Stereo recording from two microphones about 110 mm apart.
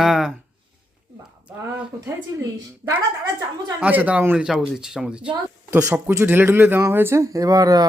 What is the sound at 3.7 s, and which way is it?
Speech, 15° right (ahead or behind).